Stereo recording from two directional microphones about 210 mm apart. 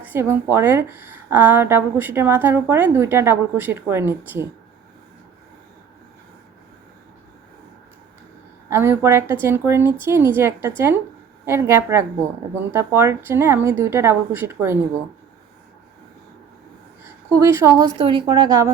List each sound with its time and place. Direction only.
0.0 s speech: 10° right (ahead or behind)
8.7 s speech: 10° right (ahead or behind)
17.0 s a woman's voice: 10° right (ahead or behind)